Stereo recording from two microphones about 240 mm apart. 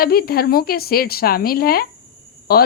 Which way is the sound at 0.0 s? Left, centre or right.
Left.